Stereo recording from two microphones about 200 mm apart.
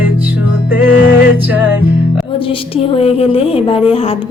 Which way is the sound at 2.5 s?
25° left (ahead or behind).